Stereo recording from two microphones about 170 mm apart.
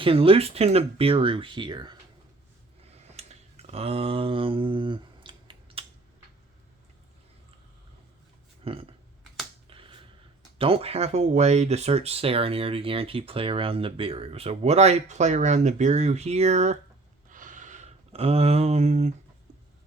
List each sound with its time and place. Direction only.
0.0 s speech: 30° right (ahead or behind)
3.2 s a sound: 40° right (ahead or behind)
8.6 s burping: 35° right (ahead or behind)
9.6 s finger snapping: 30° right (ahead or behind)
10.6 s speech: 35° right (ahead or behind)
17.2 s a sound: 50° right (ahead or behind)